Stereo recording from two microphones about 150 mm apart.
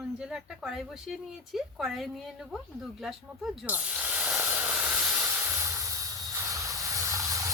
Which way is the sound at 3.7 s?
10° right (ahead or behind).